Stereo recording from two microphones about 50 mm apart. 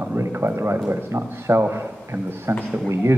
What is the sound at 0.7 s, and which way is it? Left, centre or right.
Speech, right.